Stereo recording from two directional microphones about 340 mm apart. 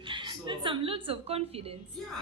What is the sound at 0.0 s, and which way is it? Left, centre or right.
A woman's voice, centre.